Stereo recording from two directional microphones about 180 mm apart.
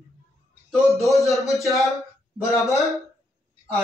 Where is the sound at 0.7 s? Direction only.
Centre (ahead or behind).